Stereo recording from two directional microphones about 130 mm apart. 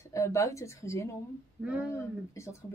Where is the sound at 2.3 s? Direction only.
20° left (ahead or behind).